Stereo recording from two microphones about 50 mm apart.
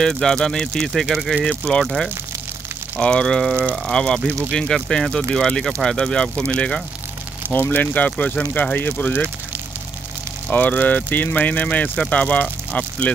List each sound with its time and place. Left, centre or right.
0.0 s speech: centre
1.1 s speech: centre
1.4 s speech: centre
3.0 s speech: centre
7.5 s speech: left
10.5 s speech: left